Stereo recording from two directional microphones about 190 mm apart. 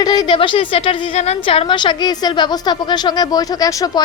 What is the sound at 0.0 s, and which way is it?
A woman's voice, 20° left (ahead or behind).